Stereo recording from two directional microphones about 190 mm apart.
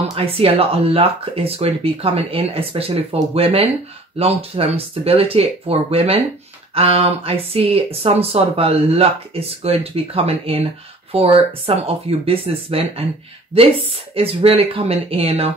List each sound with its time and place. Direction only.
0.1 s speech: 30° right (ahead or behind)
14.1 s speech: 30° right (ahead or behind)